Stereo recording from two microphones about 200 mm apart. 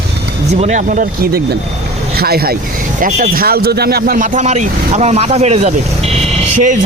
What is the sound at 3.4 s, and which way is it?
Speech, 50° right (ahead or behind).